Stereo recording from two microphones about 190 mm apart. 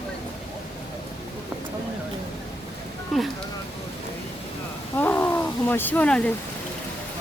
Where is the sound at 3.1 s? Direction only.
Centre (ahead or behind).